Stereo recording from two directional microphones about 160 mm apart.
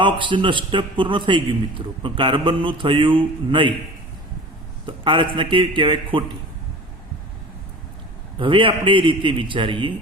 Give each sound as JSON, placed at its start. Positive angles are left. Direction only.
{"t": 0.0, "sound": "a man's voice", "side_deg": -30}
{"t": 4.9, "sound": "a man's voice", "side_deg": -30}
{"t": 8.4, "sound": "a man's voice", "side_deg": -30}